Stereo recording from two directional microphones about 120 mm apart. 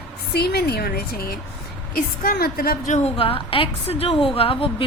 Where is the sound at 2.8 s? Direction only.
80° left.